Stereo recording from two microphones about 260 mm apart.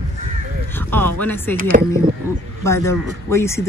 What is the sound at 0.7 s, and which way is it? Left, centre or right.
Speech, centre.